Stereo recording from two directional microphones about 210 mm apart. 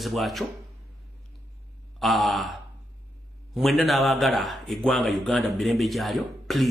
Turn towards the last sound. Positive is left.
turn(degrees=0)  # may be behind; listen again after turning